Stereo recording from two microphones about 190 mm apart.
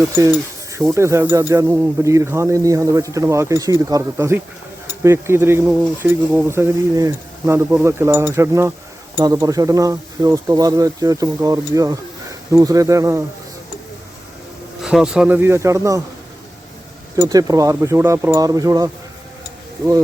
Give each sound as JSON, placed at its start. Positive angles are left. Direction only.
{"t": 0.0, "sound": "speech", "side_deg": -15}
{"t": 14.8, "sound": "speech", "side_deg": -5}
{"t": 17.2, "sound": "speech", "side_deg": -15}